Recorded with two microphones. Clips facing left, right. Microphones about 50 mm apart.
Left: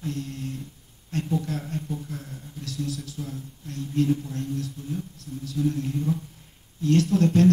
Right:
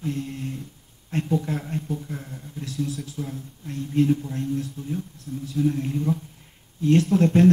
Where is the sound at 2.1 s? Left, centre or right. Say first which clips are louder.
Right 2 dB; right.